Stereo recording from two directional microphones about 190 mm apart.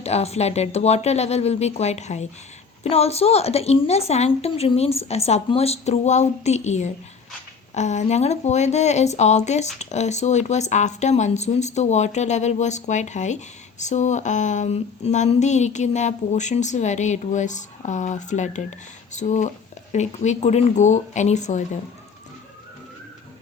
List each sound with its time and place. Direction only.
0.0 s speech: 35° left (ahead or behind)